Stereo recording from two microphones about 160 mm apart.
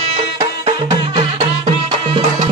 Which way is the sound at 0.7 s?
30° right (ahead or behind).